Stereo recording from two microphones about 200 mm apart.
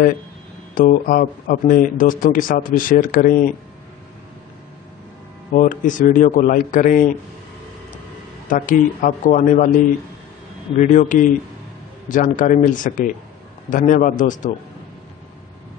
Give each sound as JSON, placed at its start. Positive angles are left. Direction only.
{"t": 0.7, "sound": "speech", "side_deg": 45}
{"t": 5.5, "sound": "a man's voice", "side_deg": 40}
{"t": 8.5, "sound": "a man's voice", "side_deg": 40}
{"t": 10.8, "sound": "a man's voice", "side_deg": 40}